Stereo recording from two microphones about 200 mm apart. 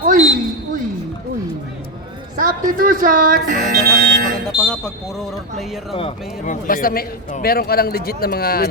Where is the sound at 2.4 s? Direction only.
40° right (ahead or behind).